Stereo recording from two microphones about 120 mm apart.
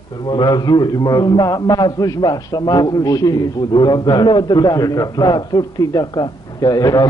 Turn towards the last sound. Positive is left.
turn(degrees=30)  # may be behind; listen again after turning